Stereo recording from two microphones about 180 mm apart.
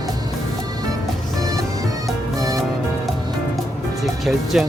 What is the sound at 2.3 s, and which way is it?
Music, 20° right (ahead or behind).